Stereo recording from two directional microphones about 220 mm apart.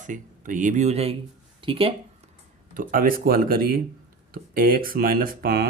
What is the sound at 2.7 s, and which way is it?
Speech, 40° right (ahead or behind).